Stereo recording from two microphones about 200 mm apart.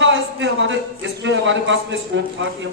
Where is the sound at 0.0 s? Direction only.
65° right (ahead or behind).